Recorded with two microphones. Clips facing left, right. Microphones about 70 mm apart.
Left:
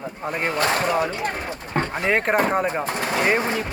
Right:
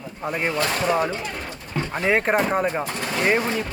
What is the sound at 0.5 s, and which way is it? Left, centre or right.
Speech, left.